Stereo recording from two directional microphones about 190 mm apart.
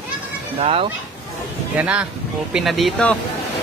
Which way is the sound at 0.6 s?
30° right (ahead or behind).